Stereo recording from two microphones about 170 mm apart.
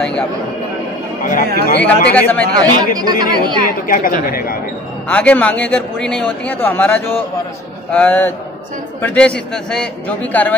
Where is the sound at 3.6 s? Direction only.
55° left (ahead or behind).